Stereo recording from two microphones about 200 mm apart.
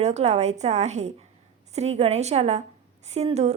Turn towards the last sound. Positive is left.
turn(degrees=-30)  # may be behind; listen again after turning